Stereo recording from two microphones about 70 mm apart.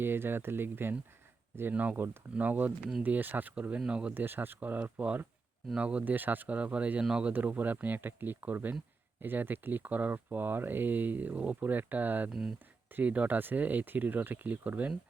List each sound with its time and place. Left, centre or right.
0.0 s speech: right; by 4.1 s centre
4.1 s speech: right; by 7.3 s centre
7.3 s speech: right
12.3 s speech: centre
12.9 s speech: right